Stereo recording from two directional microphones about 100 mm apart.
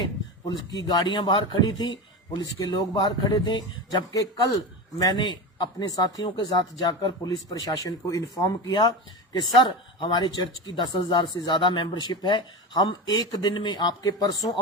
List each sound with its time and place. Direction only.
0.0 s a man's voice: 40° left (ahead or behind)